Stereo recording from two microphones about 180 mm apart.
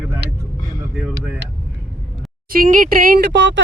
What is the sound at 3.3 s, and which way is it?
Speech, 80° right.